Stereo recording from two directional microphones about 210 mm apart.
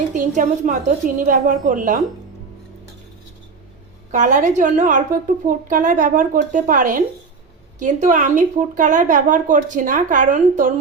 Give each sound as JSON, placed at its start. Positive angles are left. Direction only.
{"t": 0.1, "sound": "a woman's voice", "side_deg": -35}
{"t": 4.1, "sound": "a woman's voice", "side_deg": -35}